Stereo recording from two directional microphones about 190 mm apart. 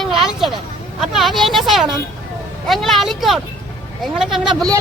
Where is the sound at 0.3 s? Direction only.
Centre (ahead or behind).